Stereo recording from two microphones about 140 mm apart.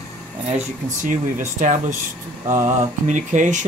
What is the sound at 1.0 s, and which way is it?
Speech, 60° right (ahead or behind).